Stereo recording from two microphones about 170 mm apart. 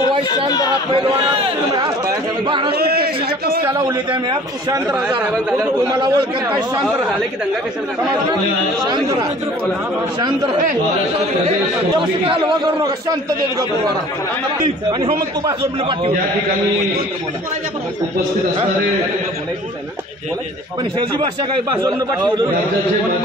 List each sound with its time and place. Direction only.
0.9 s chatter: 25° right (ahead or behind)
2.7 s a man's voice: 65° right (ahead or behind)
4.1 s speech: 25° right (ahead or behind)
5.9 s speech: 25° right (ahead or behind)
8.8 s speech: 25° right (ahead or behind)
14.9 s speech: 30° right (ahead or behind)